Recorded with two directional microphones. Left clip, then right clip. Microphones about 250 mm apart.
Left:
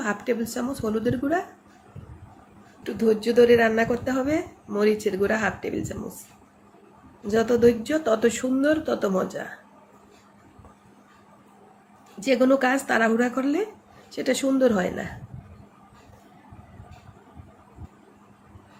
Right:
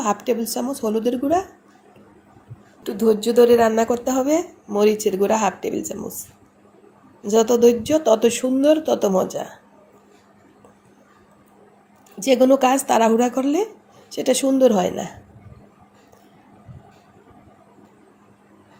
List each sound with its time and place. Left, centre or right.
0.0 s a woman's voice: centre
2.8 s a woman's voice: centre
7.2 s a woman's voice: centre
12.3 s a woman's voice: centre